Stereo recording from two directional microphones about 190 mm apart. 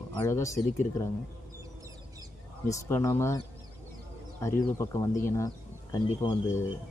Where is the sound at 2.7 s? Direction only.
15° left (ahead or behind).